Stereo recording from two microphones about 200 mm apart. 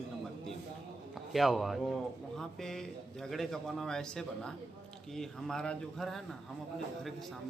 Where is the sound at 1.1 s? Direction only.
Centre (ahead or behind).